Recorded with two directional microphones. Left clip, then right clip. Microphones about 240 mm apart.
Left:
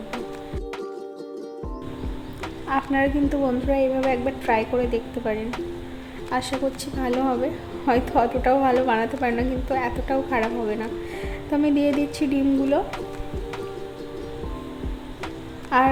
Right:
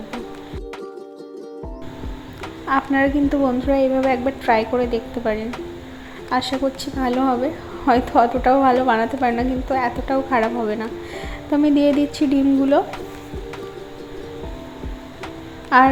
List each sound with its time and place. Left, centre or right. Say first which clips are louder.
2.6 s a woman's voice: right 4 dB; centre
15.7 s a woman's voice: right 6 dB; centre